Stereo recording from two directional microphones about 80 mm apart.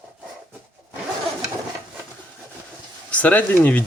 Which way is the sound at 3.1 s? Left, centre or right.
Centre.